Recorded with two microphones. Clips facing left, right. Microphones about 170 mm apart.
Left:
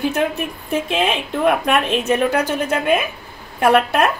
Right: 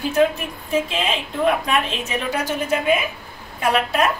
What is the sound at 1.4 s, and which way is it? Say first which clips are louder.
A woman's voice: left 3 dB; 60° left (ahead or behind).